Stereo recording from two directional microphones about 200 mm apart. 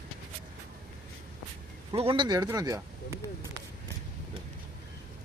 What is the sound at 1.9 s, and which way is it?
Speech, 25° right (ahead or behind).